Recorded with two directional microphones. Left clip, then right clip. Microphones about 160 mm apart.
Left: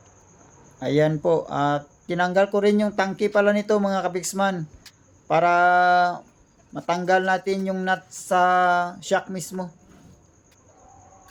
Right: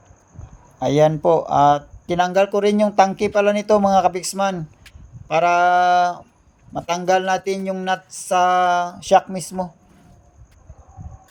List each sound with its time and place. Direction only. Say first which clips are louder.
0.8 s speech: right 5 dB; 20° right (ahead or behind)